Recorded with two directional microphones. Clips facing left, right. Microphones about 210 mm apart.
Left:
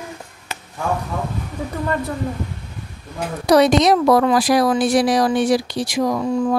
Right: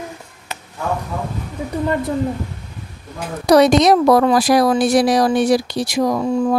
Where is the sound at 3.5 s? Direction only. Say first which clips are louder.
Right 2 dB; 40° right (ahead or behind).